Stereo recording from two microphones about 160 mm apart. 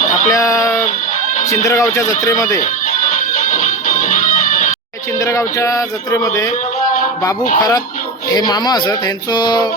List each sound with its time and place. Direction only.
0.3 s speech: 20° left (ahead or behind)
3.3 s music: 55° left (ahead or behind)
5.2 s speech: 20° left (ahead or behind)
8.3 s speech: 25° left (ahead or behind)